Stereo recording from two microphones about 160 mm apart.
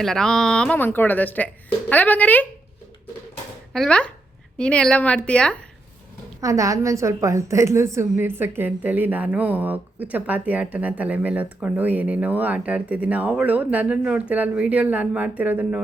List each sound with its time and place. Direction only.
0.0 s speech: 5° left (ahead or behind)
3.7 s speech: 5° left (ahead or behind)
6.4 s a woman's voice: 20° right (ahead or behind)